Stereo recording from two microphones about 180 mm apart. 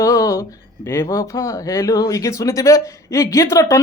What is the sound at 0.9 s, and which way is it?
A man's voice, 15° left (ahead or behind).